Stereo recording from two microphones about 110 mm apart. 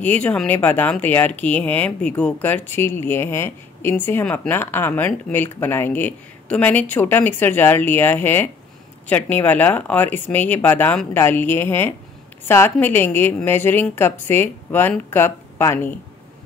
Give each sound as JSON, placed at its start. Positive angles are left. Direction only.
{"t": 0.0, "sound": "a woman's voice", "side_deg": 15}